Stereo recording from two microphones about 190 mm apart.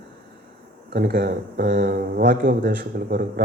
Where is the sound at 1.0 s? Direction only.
55° right (ahead or behind).